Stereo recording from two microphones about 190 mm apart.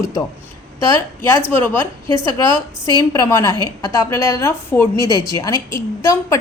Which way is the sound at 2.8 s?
20° left (ahead or behind).